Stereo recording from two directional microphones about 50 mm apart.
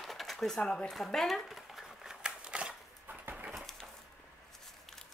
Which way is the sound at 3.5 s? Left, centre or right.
Centre.